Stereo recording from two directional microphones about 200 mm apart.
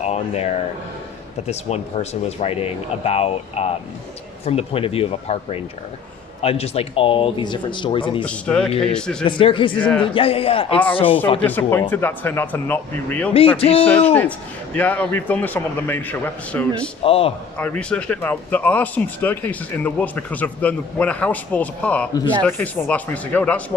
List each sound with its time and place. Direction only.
0.0 s speech: 35° left (ahead or behind)
8.2 s speech: 5° left (ahead or behind)
9.2 s speech: 25° left (ahead or behind)
11.3 s speech: 10° left (ahead or behind)
13.3 s speech: 30° left (ahead or behind)
13.8 s speech: 10° left (ahead or behind)
17.0 s speech: 30° left (ahead or behind)
17.6 s speech: 5° left (ahead or behind)